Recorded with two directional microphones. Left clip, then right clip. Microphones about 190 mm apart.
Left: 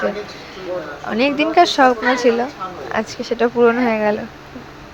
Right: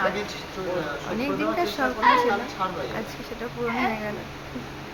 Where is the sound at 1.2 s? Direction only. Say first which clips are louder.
Left 13 dB; 45° left (ahead or behind).